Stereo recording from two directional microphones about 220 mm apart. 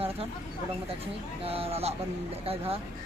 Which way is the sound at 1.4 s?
25° right (ahead or behind).